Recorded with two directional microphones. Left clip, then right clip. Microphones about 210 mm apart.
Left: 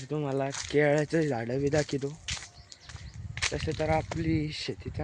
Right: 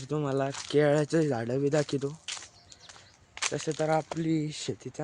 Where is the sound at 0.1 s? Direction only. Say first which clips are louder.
Right 1 dB; 20° right (ahead or behind).